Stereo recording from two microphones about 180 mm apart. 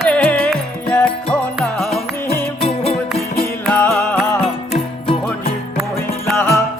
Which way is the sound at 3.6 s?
5° left (ahead or behind).